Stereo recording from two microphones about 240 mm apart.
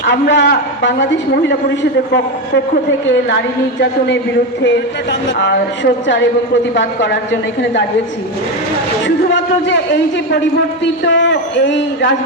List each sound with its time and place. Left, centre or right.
0.0 s a man's voice: left
3.8 s a man's voice: left
5.4 s a man's voice: left
9.0 s a man's voice: left